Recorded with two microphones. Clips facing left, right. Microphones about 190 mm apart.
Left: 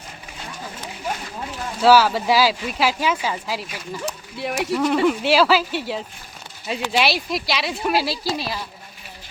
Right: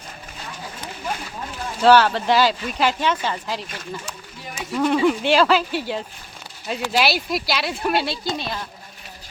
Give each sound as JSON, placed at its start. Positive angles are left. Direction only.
{"t": 1.8, "sound": "speech", "side_deg": 5}
{"t": 4.0, "sound": "speech", "side_deg": 70}
{"t": 4.7, "sound": "speech", "side_deg": 0}